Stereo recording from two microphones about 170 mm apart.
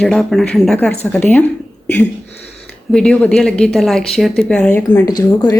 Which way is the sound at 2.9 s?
5° left (ahead or behind).